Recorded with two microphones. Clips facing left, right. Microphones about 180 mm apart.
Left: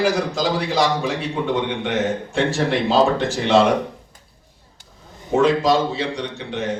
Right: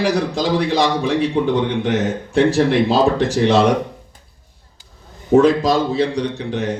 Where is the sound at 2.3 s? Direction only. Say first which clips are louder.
Right 9 dB; 40° right (ahead or behind).